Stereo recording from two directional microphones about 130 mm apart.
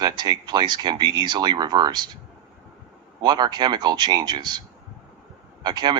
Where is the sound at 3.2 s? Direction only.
35° right (ahead or behind).